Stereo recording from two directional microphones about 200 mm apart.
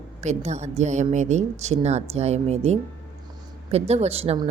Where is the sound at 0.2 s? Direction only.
35° right (ahead or behind).